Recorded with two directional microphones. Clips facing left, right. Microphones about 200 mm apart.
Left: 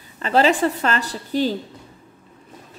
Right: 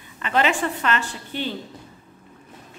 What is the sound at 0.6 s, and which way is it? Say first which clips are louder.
Speech: left 3 dB; 35° left (ahead or behind).